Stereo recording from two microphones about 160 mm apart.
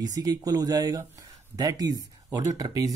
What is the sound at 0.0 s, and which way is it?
Speech, 25° right (ahead or behind).